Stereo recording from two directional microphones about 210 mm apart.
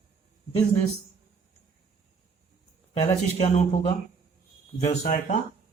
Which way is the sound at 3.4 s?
30° left (ahead or behind).